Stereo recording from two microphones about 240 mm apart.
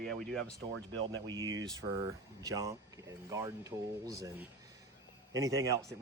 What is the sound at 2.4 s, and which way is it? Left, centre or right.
Speech, centre.